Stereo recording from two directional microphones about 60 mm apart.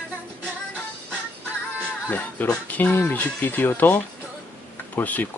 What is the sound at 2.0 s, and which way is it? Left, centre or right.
Speech, left.